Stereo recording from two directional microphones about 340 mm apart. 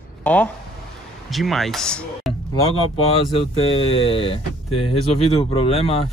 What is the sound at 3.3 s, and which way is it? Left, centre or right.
Speech, centre.